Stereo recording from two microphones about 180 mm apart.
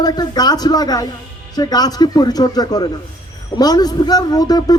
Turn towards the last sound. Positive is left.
turn(degrees=20)  # may be behind; listen again after turning